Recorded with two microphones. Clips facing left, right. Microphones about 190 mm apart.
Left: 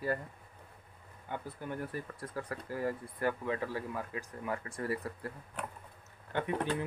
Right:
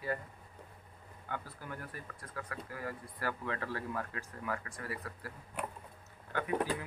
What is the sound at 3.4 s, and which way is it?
Speech, 15° left (ahead or behind).